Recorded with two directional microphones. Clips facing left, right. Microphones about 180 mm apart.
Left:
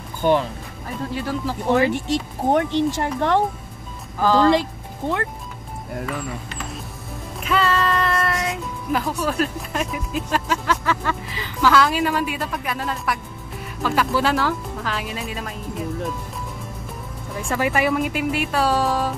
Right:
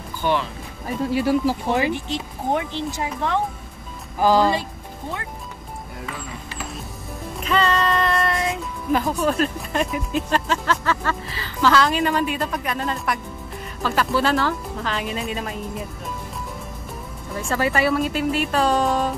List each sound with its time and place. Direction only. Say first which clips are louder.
0.2 s speech: left 4 dB; 45° left (ahead or behind)
1.1 s speech: right 7 dB; 10° right (ahead or behind)
2.5 s speech: left 6 dB; 65° left (ahead or behind)
4.2 s speech: left 1 dB; 10° right (ahead or behind)
7.4 s speech: even; 5° left (ahead or behind)
17.5 s speech: even; 15° left (ahead or behind)